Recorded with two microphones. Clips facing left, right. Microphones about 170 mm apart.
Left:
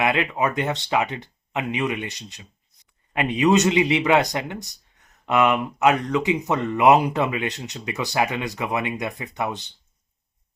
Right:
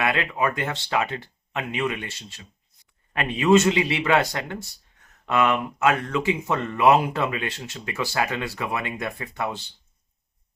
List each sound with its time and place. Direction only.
0.0 s speech: 20° left (ahead or behind)